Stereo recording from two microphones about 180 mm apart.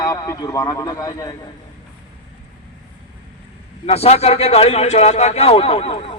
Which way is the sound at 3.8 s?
35° left (ahead or behind).